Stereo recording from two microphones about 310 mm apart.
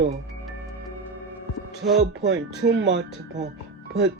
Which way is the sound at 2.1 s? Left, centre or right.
Right.